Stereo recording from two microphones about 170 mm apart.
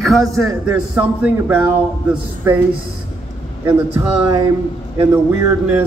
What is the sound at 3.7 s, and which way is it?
A man's voice, 15° right (ahead or behind).